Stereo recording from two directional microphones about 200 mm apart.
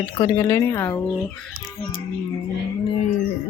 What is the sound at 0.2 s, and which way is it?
Speech, 15° left (ahead or behind).